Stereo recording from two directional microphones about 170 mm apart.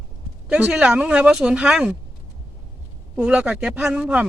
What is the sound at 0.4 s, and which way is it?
Speech, 5° right (ahead or behind).